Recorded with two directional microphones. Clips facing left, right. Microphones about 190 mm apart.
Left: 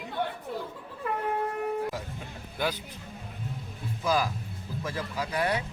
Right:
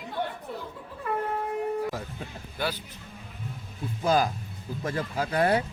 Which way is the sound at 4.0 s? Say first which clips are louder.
Right 3 dB; 30° right (ahead or behind).